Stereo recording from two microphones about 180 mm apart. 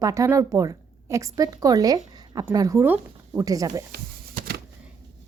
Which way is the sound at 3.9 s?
60° right (ahead or behind).